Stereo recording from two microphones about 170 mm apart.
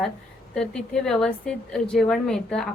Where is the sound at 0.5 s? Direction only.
5° left (ahead or behind).